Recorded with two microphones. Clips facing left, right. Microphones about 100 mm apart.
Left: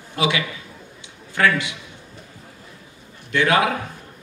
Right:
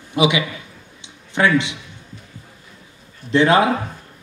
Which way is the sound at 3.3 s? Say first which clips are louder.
Right 4 dB; 30° right (ahead or behind).